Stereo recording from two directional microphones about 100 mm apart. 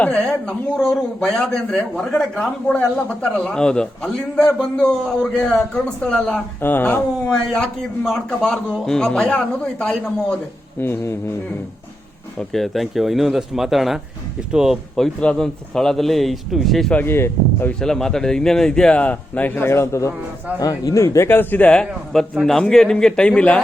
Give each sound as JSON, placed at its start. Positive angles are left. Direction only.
{"t": 0.0, "sound": "a man's voice", "side_deg": 10}
{"t": 6.6, "sound": "speech", "side_deg": 20}
{"t": 7.3, "sound": "a man's voice", "side_deg": 5}
{"t": 10.8, "sound": "speech", "side_deg": 25}
{"t": 12.4, "sound": "a man's voice", "side_deg": 0}
{"t": 16.9, "sound": "speech", "side_deg": 20}
{"t": 17.7, "sound": "a man's voice", "side_deg": 5}